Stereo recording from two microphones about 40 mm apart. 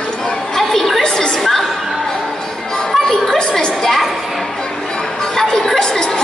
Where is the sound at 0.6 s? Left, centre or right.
Centre.